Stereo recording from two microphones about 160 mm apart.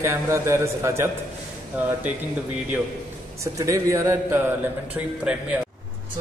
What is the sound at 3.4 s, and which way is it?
A man's voice, 20° right (ahead or behind).